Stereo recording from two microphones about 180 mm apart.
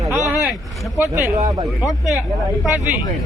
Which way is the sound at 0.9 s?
15° right (ahead or behind).